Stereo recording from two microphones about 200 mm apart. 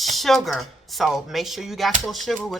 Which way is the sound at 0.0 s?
Centre (ahead or behind).